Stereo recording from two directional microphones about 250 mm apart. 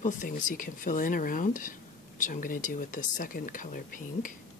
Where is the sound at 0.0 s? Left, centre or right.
Left.